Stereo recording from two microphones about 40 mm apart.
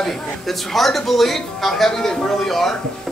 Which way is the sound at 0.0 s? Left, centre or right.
Centre.